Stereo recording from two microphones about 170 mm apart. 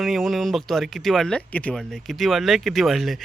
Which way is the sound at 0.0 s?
Centre (ahead or behind).